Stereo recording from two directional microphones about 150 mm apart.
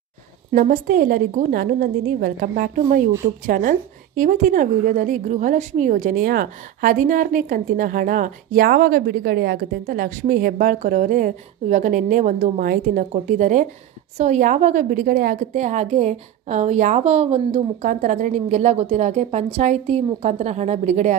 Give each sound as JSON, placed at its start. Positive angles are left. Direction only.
{"t": 0.5, "sound": "a woman's voice", "side_deg": -60}
{"t": 13.1, "sound": "a woman's voice", "side_deg": -50}